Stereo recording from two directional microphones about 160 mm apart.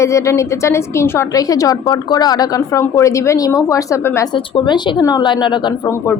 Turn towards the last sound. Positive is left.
turn(degrees=25)  # may be behind; listen again after turning